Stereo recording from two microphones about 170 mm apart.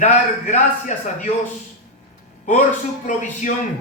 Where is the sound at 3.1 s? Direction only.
50° left (ahead or behind).